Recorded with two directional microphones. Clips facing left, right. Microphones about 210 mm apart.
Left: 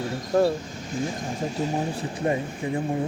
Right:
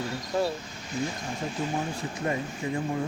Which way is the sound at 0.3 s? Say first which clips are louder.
Left 7 dB; 45° left (ahead or behind).